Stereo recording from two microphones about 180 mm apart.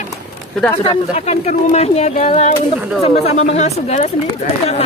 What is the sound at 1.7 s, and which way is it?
Speech, 35° left (ahead or behind).